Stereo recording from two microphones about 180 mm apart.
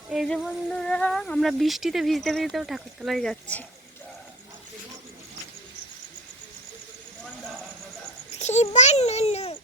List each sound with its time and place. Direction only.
0.1 s speech: centre (ahead or behind)
8.3 s a child's voice: 40° left (ahead or behind)